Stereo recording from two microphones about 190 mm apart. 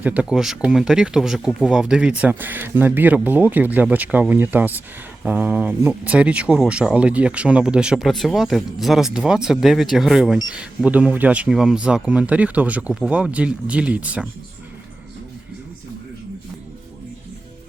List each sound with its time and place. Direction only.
0.0 s speech: 5° right (ahead or behind)